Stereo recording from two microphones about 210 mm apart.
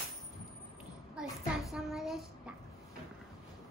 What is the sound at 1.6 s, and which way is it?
Child singing, centre (ahead or behind).